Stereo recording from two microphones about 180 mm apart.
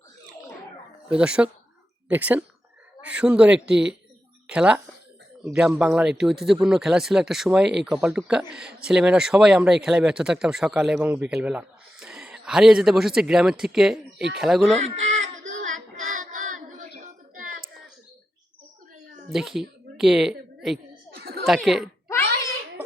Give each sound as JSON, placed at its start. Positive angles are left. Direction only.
{"t": 1.1, "sound": "speech", "side_deg": -5}
{"t": 14.8, "sound": "child singing", "side_deg": -35}
{"t": 19.3, "sound": "speech", "side_deg": 0}
{"t": 21.2, "sound": "chuckle", "side_deg": -60}
{"t": 21.4, "sound": "speech", "side_deg": 0}